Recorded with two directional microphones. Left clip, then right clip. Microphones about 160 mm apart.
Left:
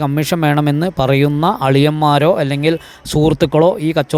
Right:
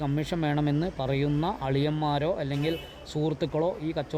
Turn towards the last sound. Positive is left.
turn(degrees=45)  # may be behind; listen again after turning